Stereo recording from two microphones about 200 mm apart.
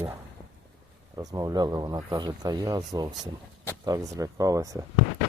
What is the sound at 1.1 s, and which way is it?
Speech, 20° right (ahead or behind).